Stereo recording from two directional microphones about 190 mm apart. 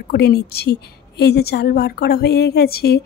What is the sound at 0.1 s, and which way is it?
A woman's voice, 60° left (ahead or behind).